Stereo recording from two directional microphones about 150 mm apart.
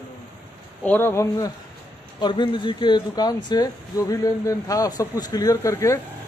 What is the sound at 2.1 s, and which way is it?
Speech, 30° left (ahead or behind).